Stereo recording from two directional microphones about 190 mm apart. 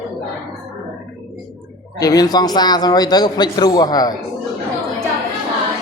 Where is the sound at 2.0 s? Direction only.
20° left (ahead or behind).